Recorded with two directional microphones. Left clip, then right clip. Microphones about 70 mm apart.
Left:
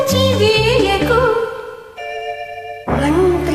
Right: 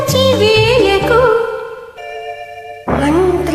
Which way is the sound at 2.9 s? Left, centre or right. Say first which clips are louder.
Right 2 dB; centre.